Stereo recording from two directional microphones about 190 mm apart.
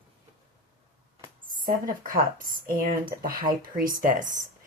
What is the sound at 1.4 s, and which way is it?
Speech, 45° right (ahead or behind).